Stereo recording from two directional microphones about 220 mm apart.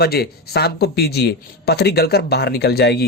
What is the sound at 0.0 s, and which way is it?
Speech, 45° left (ahead or behind).